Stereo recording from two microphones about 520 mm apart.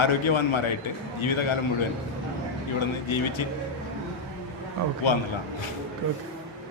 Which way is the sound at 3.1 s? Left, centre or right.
Left.